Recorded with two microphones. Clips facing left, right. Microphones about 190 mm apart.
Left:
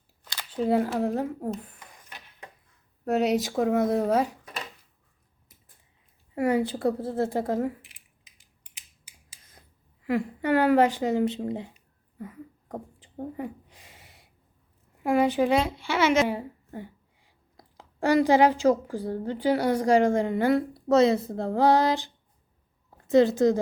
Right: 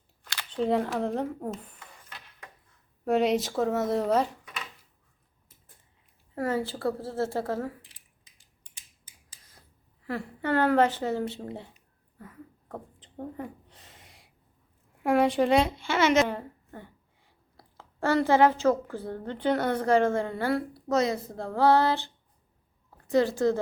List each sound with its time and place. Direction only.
0.3 s speech: 5° left (ahead or behind)
2.0 s a sound: 20° left (ahead or behind)
3.0 s speech: 5° left (ahead or behind)
6.3 s speech: 15° left (ahead or behind)
9.0 s a sound: 15° left (ahead or behind)
14.9 s a woman's voice: centre (ahead or behind); by 23.6 s 20° left (ahead or behind)